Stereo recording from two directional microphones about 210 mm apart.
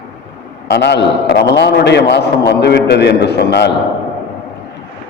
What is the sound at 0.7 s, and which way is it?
A man's voice, 55° left (ahead or behind).